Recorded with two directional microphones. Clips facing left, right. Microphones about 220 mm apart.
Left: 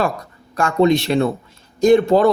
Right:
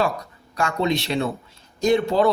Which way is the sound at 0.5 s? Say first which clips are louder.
Left 7 dB; 50° left (ahead or behind).